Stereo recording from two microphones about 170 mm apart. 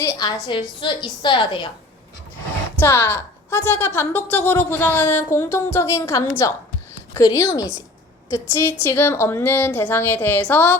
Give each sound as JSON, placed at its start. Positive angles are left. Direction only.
{"t": 0.0, "sound": "a woman's voice", "side_deg": 25}
{"t": 2.8, "sound": "a woman's voice", "side_deg": 15}